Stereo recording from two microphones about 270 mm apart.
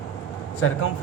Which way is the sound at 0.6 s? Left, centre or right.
Left.